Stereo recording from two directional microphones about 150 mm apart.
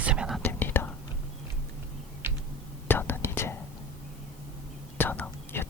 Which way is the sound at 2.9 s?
15° left (ahead or behind).